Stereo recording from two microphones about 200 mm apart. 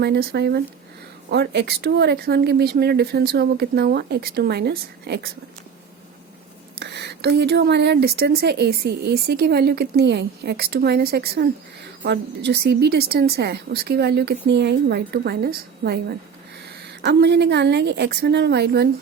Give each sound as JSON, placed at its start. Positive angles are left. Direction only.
{"t": 0.0, "sound": "a woman's voice", "side_deg": -55}
{"t": 6.7, "sound": "a woman's voice", "side_deg": -55}